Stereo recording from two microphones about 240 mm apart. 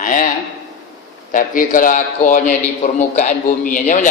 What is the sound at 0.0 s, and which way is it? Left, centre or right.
Speech, left.